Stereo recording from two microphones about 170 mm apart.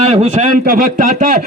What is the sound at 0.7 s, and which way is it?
Speech, 55° right (ahead or behind).